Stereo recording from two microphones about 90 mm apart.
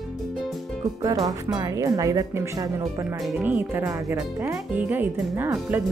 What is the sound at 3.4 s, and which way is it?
Speech, 20° right (ahead or behind).